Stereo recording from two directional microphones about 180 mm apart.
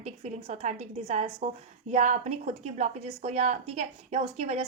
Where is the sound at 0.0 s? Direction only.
40° right (ahead or behind).